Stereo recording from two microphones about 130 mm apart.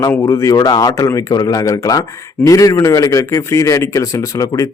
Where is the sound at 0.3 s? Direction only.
25° left (ahead or behind).